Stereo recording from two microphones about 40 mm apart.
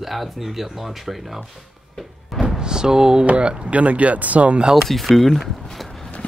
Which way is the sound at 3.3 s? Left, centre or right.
Right.